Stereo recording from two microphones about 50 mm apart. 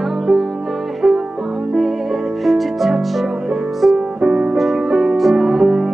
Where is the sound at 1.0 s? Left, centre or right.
Centre.